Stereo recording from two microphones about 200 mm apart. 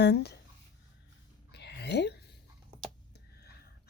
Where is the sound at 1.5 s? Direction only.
55° left (ahead or behind).